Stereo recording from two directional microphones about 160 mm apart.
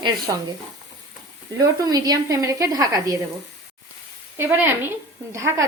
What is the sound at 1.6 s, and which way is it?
Speech, 25° right (ahead or behind).